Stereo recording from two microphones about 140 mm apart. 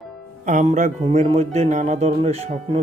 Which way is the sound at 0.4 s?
60° right (ahead or behind).